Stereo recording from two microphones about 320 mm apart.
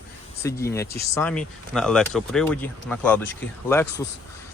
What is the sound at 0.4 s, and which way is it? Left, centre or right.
Speech, centre.